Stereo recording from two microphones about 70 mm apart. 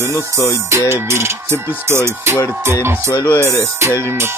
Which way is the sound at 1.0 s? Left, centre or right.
Right.